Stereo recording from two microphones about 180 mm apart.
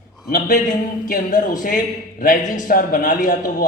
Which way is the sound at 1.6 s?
50° left (ahead or behind).